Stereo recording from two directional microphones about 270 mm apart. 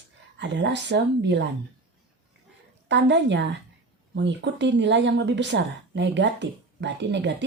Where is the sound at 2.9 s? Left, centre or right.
Right.